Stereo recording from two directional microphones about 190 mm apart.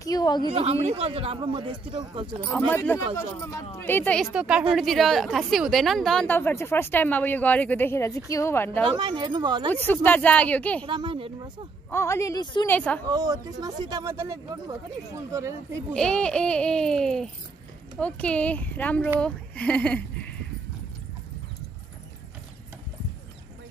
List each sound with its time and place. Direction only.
0.0 s a sound: 20° left (ahead or behind)
0.5 s a man's voice: 30° right (ahead or behind)
2.4 s a woman's voice: 10° left (ahead or behind)
4.3 s a child's voice: 5° right (ahead or behind); by 8.8 s 10° left (ahead or behind)
8.8 s speech: 25° right (ahead or behind)
9.7 s a woman's voice: 10° left (ahead or behind)
10.9 s speech: 25° right (ahead or behind)
11.9 s a woman's voice: 15° left (ahead or behind)
12.6 s a woman's voice: 10° left (ahead or behind)
13.1 s speech: 20° right (ahead or behind)
15.9 s a child's voice: 5° left (ahead or behind)